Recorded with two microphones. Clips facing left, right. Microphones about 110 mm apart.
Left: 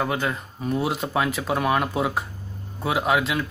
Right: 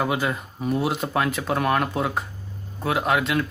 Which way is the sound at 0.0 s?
5° right (ahead or behind).